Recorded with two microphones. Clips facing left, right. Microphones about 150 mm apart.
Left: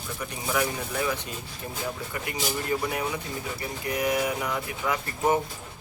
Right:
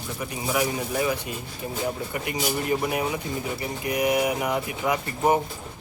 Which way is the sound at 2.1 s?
20° right (ahead or behind).